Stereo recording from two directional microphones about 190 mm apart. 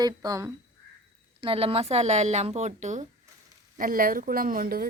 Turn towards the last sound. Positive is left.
turn(degrees=-50)  # may be behind; listen again after turning